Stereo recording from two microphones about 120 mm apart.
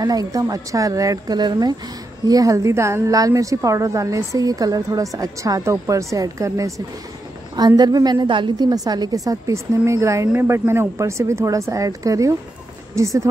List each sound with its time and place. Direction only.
0.0 s a woman's voice: 30° right (ahead or behind)